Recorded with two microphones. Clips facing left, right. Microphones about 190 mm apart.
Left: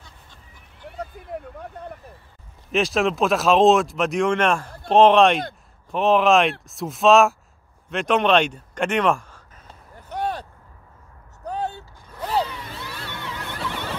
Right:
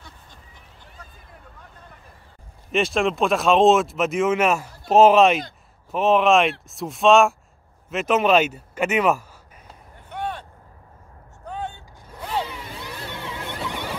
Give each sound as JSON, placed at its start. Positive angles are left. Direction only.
{"t": 0.8, "sound": "vehicle", "side_deg": 65}
{"t": 2.7, "sound": "speech", "side_deg": 0}
{"t": 9.9, "sound": "a sound", "side_deg": 40}
{"t": 11.4, "sound": "vehicle", "side_deg": 40}
{"t": 12.2, "sound": "zipper", "side_deg": 40}
{"t": 12.4, "sound": "a sound", "side_deg": -15}